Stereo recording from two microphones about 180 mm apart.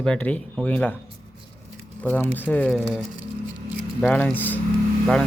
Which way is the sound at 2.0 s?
10° left (ahead or behind).